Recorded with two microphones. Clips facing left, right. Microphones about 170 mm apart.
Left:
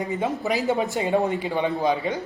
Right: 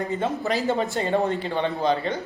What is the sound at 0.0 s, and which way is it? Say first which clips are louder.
A man's voice: even; 15° left (ahead or behind).